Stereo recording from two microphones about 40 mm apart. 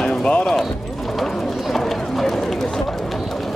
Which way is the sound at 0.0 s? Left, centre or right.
Left.